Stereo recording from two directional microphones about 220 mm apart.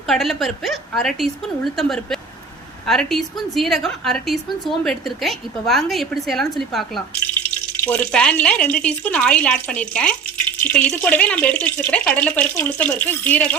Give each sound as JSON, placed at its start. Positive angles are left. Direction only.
{"t": 0.1, "sound": "a woman's voice", "side_deg": 0}